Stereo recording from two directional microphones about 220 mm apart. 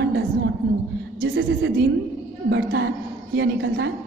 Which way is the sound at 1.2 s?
55° right (ahead or behind).